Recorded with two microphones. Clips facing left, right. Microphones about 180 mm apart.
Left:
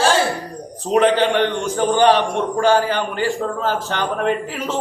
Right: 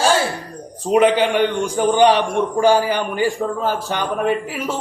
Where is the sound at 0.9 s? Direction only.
10° right (ahead or behind).